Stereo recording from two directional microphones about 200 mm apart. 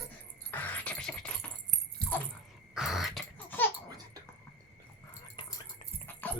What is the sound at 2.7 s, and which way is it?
Dog, centre (ahead or behind).